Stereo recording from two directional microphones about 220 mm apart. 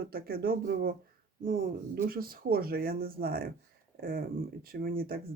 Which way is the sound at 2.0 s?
40° right (ahead or behind).